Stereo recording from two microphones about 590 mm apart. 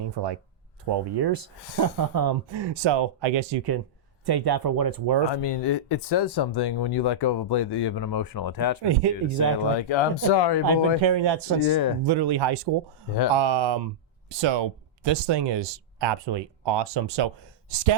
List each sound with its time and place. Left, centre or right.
0.2 s speech: right
5.3 s speech: left
8.9 s speech: right
9.7 s speech: left
10.7 s speech: right
11.6 s speech: left
12.0 s speech: right